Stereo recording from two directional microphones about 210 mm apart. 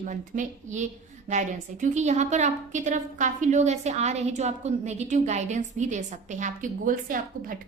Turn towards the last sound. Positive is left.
turn(degrees=-40)  # may be behind; listen again after turning